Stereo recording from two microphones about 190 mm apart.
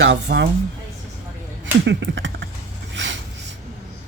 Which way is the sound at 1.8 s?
70° right (ahead or behind).